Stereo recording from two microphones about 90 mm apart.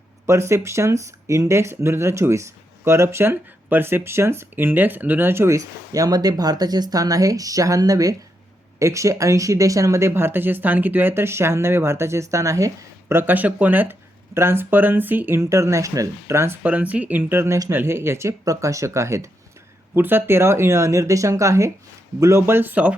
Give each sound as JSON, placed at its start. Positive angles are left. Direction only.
{"t": 0.3, "sound": "speech", "side_deg": -30}
{"t": 15.4, "sound": "speech", "side_deg": -35}
{"t": 16.6, "sound": "speech", "side_deg": -15}